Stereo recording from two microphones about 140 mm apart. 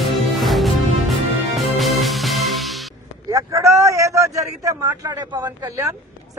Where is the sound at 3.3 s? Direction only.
25° right (ahead or behind).